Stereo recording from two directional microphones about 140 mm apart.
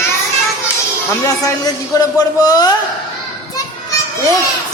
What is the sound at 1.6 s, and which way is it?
A woman's voice, 25° left (ahead or behind).